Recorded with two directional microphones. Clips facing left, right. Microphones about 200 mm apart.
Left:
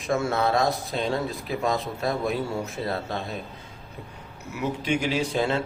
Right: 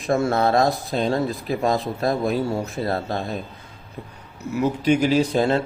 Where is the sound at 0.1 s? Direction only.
35° right (ahead or behind).